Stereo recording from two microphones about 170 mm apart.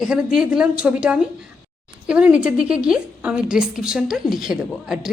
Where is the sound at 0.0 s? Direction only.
5° right (ahead or behind).